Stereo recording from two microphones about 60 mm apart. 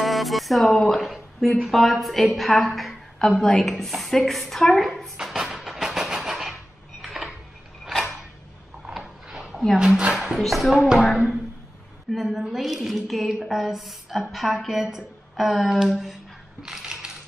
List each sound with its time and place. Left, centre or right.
0.0 s music: centre
1.6 s a woman's voice: centre
5.1 s music: centre
7.0 s dishes: centre
7.8 s a sound: centre
9.8 s a woman's voice: centre
12.1 s a woman's voice: centre
16.6 s coin: centre